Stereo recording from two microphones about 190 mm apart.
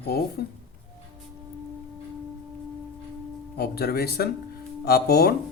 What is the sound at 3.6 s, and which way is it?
Speech, 55° left (ahead or behind).